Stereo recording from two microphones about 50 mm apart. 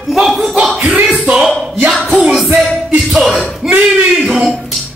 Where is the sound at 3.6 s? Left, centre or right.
Centre.